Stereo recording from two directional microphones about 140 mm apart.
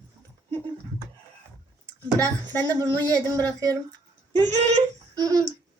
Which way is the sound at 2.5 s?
15° left (ahead or behind).